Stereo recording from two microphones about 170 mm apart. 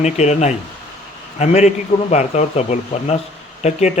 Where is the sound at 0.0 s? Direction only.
40° left (ahead or behind).